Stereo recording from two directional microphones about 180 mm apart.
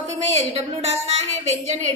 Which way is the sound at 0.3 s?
35° right (ahead or behind).